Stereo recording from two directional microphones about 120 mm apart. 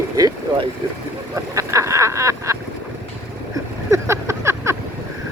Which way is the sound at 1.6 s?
25° right (ahead or behind).